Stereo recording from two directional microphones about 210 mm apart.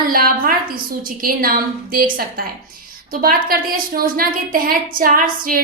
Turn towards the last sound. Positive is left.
turn(degrees=-40)  # may be behind; listen again after turning